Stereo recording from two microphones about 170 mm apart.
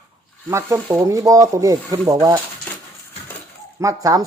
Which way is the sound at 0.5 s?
15° right (ahead or behind).